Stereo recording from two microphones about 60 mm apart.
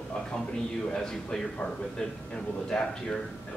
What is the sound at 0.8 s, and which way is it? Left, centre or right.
Speech, centre.